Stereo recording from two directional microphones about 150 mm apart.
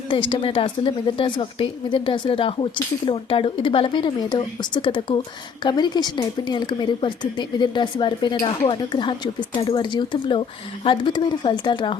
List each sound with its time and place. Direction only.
0.1 s a woman's voice: 35° left (ahead or behind)